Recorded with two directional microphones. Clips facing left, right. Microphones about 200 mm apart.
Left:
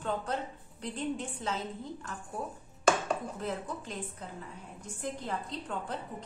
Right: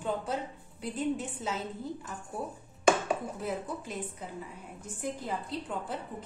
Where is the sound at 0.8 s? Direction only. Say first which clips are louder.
Right 3 dB; 5° right (ahead or behind).